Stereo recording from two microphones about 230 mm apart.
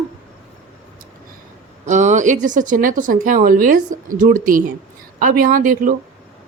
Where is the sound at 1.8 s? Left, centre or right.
Right.